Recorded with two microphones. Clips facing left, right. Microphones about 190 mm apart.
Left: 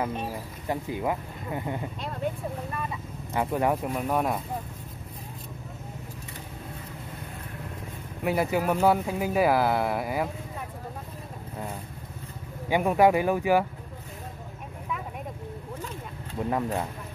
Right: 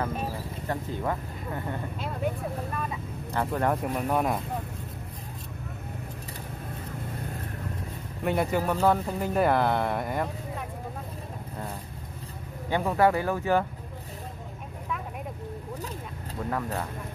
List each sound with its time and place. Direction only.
0.7 s speech: 10° left (ahead or behind)
3.3 s speech: 10° left (ahead or behind)
8.2 s speech: 5° left (ahead or behind)
12.6 s speech: 15° left (ahead or behind)
16.4 s speech: 20° left (ahead or behind)